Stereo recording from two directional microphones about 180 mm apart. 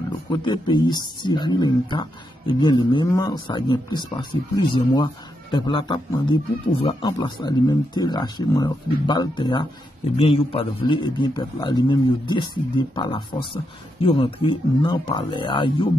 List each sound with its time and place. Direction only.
0.3 s a man's voice: 25° left (ahead or behind)